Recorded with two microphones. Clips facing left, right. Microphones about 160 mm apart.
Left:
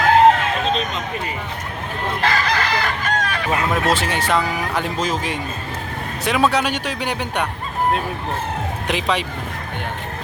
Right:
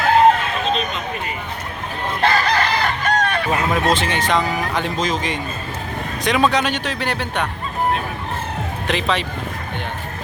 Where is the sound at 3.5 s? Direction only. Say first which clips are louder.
Left 1 dB; 5° left (ahead or behind).